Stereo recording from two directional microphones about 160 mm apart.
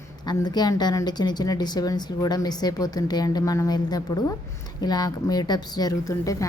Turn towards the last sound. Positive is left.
turn(degrees=20)  # may be behind; listen again after turning